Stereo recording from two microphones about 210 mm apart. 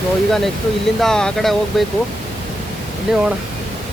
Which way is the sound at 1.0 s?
5° left (ahead or behind).